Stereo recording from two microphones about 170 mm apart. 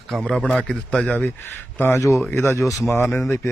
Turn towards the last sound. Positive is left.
turn(degrees=15)  # may be behind; listen again after turning